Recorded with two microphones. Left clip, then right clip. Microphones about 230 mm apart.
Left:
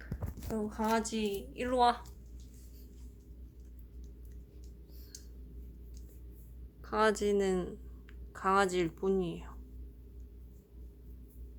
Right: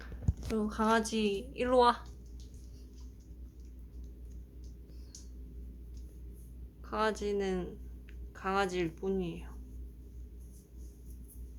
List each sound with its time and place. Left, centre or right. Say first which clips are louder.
0.5 s a woman's voice: right 3 dB; centre
6.8 s speech: left 3 dB; left